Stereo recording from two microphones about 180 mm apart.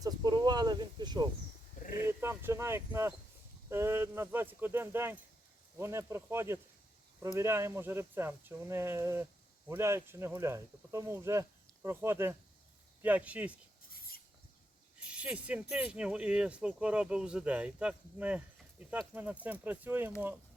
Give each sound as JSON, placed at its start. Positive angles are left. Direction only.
{"t": 0.0, "sound": "speech", "side_deg": -20}
{"t": 2.0, "sound": "speech", "side_deg": -15}
{"t": 14.9, "sound": "snake", "side_deg": -5}
{"t": 15.7, "sound": "speech", "side_deg": -5}